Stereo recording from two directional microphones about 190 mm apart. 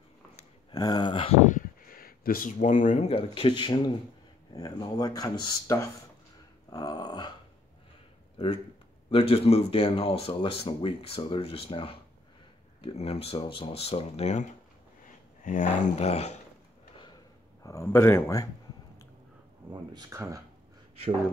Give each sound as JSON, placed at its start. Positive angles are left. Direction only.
{"t": 0.4, "sound": "a sound", "side_deg": 20}
{"t": 1.4, "sound": "speech", "side_deg": 45}
{"t": 6.7, "sound": "dog", "side_deg": 20}
{"t": 8.4, "sound": "speech", "side_deg": 25}
{"t": 16.9, "sound": "a sound", "side_deg": 25}
{"t": 17.6, "sound": "speech", "side_deg": 15}
{"t": 19.7, "sound": "speech", "side_deg": -20}